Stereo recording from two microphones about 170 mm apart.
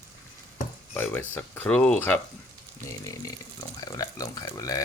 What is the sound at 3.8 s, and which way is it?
Speech, 20° left (ahead or behind).